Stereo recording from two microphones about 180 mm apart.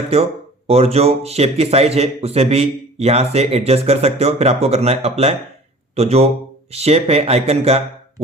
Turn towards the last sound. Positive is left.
turn(degrees=-35)  # may be behind; listen again after turning